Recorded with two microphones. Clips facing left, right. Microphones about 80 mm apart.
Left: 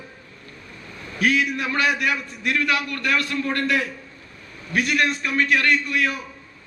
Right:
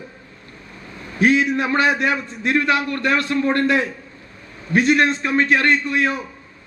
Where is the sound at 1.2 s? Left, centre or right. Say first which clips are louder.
Right 5 dB; right.